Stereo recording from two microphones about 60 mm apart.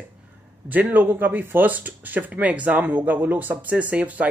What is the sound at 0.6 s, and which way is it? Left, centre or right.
Speech, right.